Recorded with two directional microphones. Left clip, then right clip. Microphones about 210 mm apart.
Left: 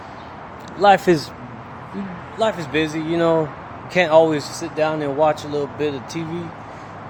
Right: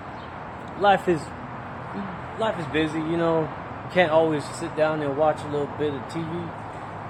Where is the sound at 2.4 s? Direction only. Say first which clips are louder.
Left 5 dB; 50° left (ahead or behind).